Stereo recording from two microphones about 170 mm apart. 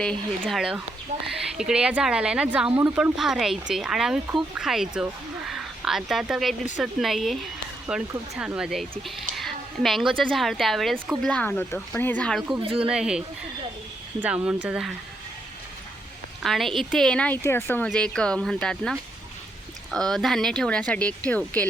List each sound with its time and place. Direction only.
0.0 s a woman's voice: 5° left (ahead or behind)
12.6 s speech: 35° right (ahead or behind)
12.9 s speech: 5° right (ahead or behind)
16.4 s speech: centre (ahead or behind)